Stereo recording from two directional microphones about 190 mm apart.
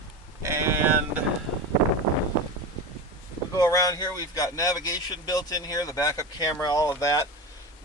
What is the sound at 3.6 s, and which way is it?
A man's voice, 20° left (ahead or behind).